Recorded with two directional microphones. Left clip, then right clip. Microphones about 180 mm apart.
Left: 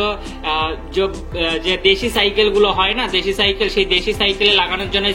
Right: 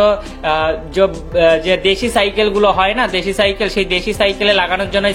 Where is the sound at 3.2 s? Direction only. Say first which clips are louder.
Right 2 dB; 90° right.